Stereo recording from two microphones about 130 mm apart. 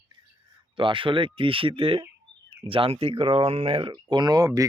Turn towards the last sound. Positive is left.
turn(degrees=-30)  # may be behind; listen again after turning